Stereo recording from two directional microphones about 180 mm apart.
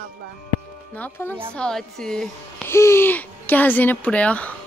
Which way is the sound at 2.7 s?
15° left (ahead or behind).